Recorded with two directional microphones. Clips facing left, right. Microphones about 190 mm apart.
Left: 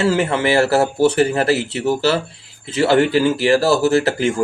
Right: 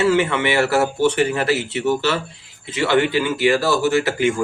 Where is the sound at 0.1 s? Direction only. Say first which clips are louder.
Left 1 dB; 35° left (ahead or behind).